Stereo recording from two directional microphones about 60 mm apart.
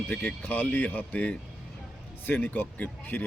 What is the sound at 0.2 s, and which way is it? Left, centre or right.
Speech, left.